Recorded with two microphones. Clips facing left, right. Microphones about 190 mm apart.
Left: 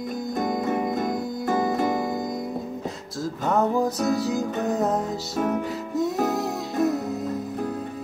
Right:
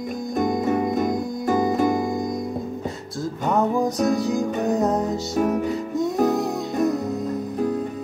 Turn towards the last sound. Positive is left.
turn(degrees=0)  # may be behind; listen again after turning